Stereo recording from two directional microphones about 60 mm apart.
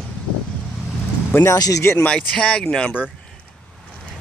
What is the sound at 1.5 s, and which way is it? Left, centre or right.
Speech, left.